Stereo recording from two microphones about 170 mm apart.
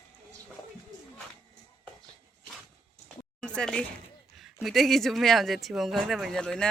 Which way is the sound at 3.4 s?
5° left (ahead or behind).